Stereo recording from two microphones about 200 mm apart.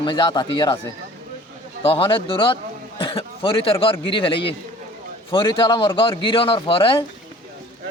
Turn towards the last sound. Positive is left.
turn(degrees=25)  # may be behind; listen again after turning